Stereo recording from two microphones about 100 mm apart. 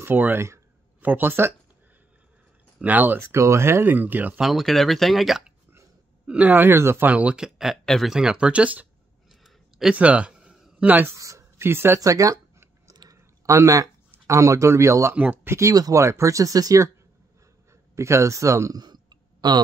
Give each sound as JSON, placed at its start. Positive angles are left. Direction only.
{"t": 0.0, "sound": "speech", "side_deg": -20}
{"t": 2.8, "sound": "speech", "side_deg": -15}
{"t": 4.4, "sound": "speech", "side_deg": 0}
{"t": 6.2, "sound": "speech", "side_deg": -15}
{"t": 9.3, "sound": "a sound", "side_deg": 0}
{"t": 9.9, "sound": "speech", "side_deg": -10}
{"t": 11.1, "sound": "a sound", "side_deg": -30}
{"t": 13.5, "sound": "speech", "side_deg": -35}
{"t": 15.1, "sound": "speech", "side_deg": -15}
{"t": 15.5, "sound": "speech", "side_deg": -35}
{"t": 17.9, "sound": "speech", "side_deg": -30}
{"t": 18.8, "sound": "clicking", "side_deg": -45}